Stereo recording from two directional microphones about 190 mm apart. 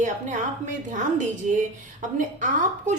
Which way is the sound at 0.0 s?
40° right (ahead or behind).